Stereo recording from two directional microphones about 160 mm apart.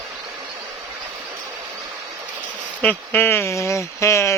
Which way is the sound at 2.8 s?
10° left (ahead or behind).